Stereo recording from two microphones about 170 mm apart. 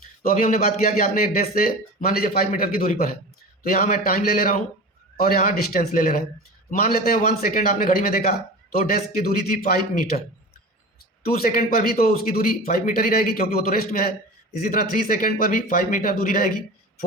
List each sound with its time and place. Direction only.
0.2 s speech: 55° left (ahead or behind)